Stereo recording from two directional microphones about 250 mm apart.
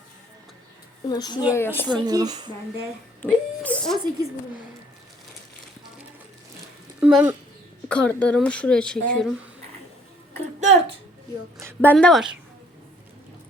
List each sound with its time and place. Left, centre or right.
1.0 s a woman's voice: centre
1.9 s speech: centre
3.2 s speech: centre
7.0 s speech: centre
7.9 s speech: centre
10.6 s a sound: right
11.8 s speech: centre